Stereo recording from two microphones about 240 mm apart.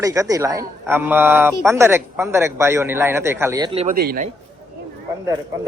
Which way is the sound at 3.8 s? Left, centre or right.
Right.